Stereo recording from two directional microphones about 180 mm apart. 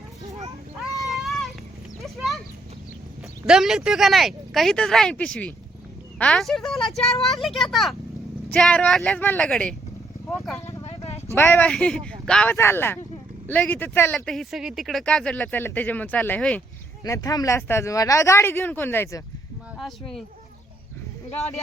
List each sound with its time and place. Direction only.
0.9 s a sound: centre (ahead or behind)
3.4 s speech: centre (ahead or behind)
10.8 s a sound: 35° left (ahead or behind)
11.3 s speech: 10° left (ahead or behind)
17.0 s speech: 20° left (ahead or behind)
19.8 s speech: centre (ahead or behind)